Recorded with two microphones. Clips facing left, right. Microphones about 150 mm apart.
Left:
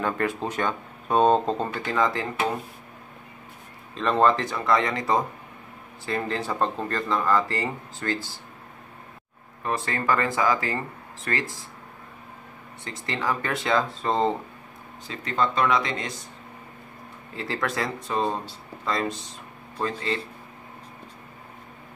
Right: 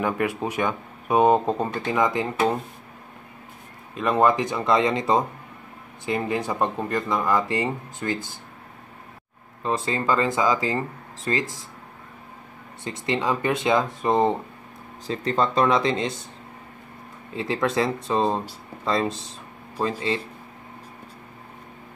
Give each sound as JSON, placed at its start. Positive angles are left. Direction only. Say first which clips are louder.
{"t": 0.0, "sound": "speech", "louder": "right 2 dB", "side_deg": -10}
{"t": 3.9, "sound": "speech", "louder": "right 1 dB", "side_deg": -10}
{"t": 9.6, "sound": "speech", "louder": "right 3 dB", "side_deg": -20}
{"t": 12.8, "sound": "speech", "louder": "right 4 dB", "side_deg": -20}
{"t": 15.0, "sound": "speech", "louder": "right 3 dB", "side_deg": -35}
{"t": 17.4, "sound": "speech", "louder": "right 5 dB", "side_deg": -20}